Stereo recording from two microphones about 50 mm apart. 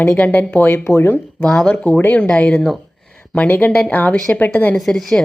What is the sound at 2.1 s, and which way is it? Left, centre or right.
Speech, left.